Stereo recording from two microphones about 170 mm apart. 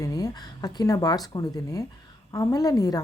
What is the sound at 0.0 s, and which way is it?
A woman's voice, 20° left (ahead or behind).